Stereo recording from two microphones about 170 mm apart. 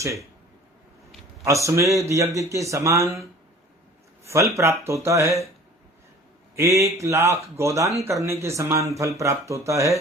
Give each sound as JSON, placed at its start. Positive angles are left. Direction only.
{"t": 0.0, "sound": "speech", "side_deg": -20}
{"t": 1.5, "sound": "speech", "side_deg": -15}
{"t": 4.3, "sound": "speech", "side_deg": -15}
{"t": 6.6, "sound": "speech", "side_deg": -20}